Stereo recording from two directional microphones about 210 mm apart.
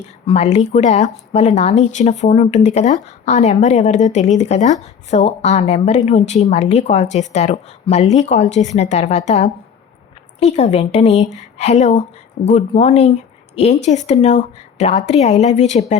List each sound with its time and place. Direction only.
0.0 s speech: 30° left (ahead or behind)